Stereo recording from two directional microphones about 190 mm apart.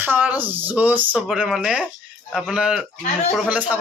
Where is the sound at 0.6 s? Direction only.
10° right (ahead or behind).